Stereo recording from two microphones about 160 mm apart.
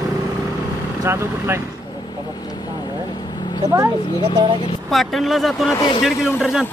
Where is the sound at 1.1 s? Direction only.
15° right (ahead or behind).